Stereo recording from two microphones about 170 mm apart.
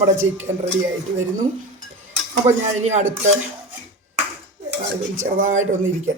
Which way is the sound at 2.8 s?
40° right (ahead or behind).